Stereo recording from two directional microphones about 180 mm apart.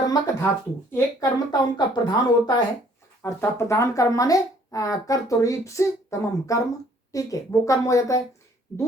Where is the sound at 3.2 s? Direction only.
15° left (ahead or behind).